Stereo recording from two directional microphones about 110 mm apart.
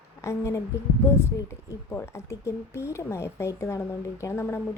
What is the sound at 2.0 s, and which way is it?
A woman's voice, 25° left (ahead or behind).